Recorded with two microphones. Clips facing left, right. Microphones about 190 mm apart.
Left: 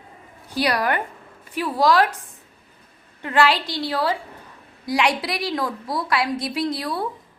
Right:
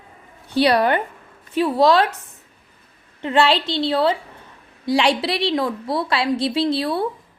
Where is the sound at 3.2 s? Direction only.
25° right (ahead or behind).